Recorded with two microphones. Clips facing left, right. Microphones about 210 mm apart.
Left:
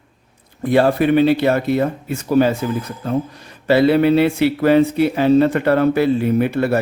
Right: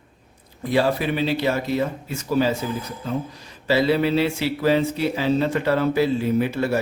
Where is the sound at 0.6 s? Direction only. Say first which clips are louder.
Left 6 dB; 55° left (ahead or behind).